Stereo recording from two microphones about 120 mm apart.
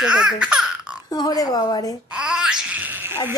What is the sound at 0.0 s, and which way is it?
Laughter, 5° right (ahead or behind).